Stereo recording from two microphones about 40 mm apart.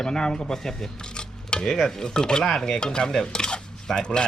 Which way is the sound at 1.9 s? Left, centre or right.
Centre.